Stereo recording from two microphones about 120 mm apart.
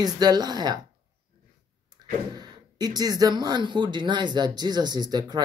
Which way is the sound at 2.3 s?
35° right (ahead or behind).